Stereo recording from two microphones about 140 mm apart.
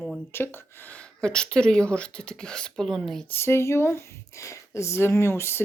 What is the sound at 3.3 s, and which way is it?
Speech, 15° left (ahead or behind).